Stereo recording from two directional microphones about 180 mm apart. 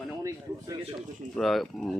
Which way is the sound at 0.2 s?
20° right (ahead or behind).